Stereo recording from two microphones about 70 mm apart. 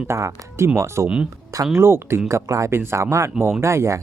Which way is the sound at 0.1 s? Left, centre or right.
Right.